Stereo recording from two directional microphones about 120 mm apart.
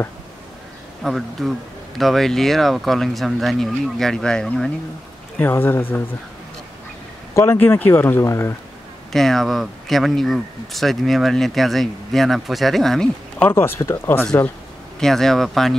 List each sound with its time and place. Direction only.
1.0 s speech: centre (ahead or behind)
5.4 s speech: 15° left (ahead or behind)
7.3 s speech: 20° left (ahead or behind)
9.1 s speech: 5° left (ahead or behind)
13.5 s speech: 20° left (ahead or behind)
15.0 s speech: 5° left (ahead or behind)